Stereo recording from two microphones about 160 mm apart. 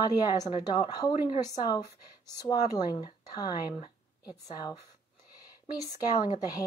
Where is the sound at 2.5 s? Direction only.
25° left (ahead or behind).